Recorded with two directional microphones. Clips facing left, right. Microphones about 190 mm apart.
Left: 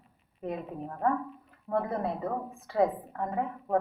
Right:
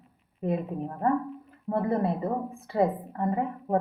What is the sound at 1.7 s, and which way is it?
Speech, 20° right (ahead or behind).